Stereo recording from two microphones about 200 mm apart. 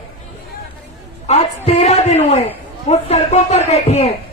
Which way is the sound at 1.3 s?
30° left (ahead or behind).